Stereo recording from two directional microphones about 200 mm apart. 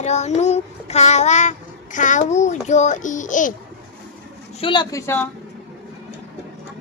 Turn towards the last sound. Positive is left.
turn(degrees=10)  # may be behind; listen again after turning